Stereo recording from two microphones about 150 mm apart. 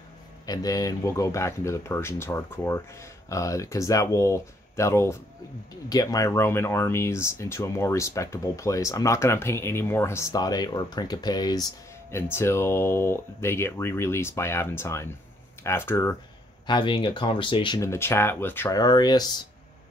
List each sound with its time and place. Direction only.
0.5 s speech: 25° left (ahead or behind)
16.6 s speech: 30° left (ahead or behind)
17.7 s speech: 15° left (ahead or behind)
18.8 s speech: 25° left (ahead or behind)